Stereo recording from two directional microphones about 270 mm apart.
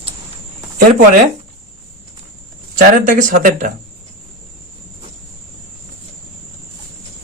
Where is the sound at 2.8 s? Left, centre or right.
Right.